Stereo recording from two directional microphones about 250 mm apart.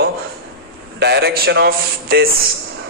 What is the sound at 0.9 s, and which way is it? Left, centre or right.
A man's voice, right.